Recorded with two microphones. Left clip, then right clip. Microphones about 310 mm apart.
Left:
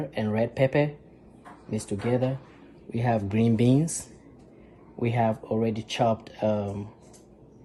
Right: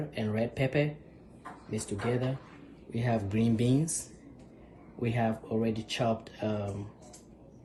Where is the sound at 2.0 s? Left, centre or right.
Left.